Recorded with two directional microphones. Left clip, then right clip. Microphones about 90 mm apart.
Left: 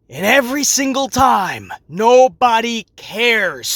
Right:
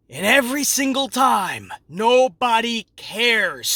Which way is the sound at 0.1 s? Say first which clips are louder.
Left 3 dB; 25° left (ahead or behind).